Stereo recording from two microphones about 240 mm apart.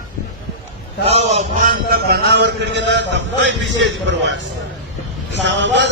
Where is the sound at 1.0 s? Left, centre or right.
Right.